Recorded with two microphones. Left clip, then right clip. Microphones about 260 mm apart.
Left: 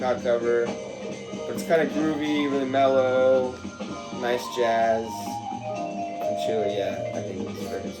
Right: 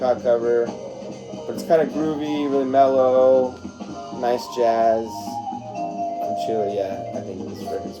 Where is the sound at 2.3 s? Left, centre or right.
Centre.